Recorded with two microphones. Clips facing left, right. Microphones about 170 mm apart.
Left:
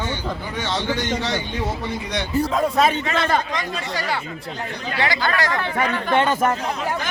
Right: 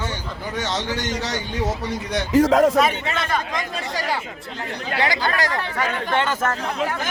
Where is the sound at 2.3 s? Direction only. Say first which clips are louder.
Right 6 dB; 85° right.